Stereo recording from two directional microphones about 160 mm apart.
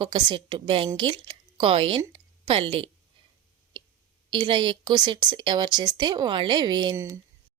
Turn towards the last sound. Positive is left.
turn(degrees=-15)  # may be behind; listen again after turning